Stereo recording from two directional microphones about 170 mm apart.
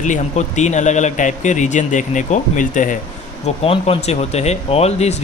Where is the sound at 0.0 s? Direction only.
45° left (ahead or behind).